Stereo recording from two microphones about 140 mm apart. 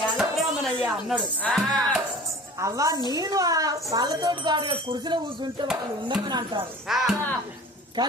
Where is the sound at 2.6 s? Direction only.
25° right (ahead or behind).